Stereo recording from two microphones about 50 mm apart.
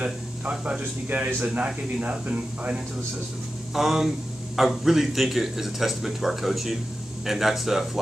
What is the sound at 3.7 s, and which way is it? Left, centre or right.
Speech, centre.